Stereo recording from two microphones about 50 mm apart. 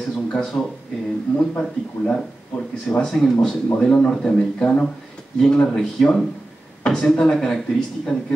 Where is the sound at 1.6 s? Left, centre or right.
Centre.